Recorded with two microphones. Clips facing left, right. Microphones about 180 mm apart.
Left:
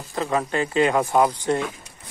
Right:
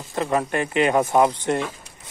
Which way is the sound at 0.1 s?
20° right (ahead or behind).